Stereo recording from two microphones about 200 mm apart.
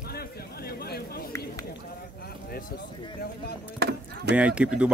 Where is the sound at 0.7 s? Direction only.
50° left (ahead or behind).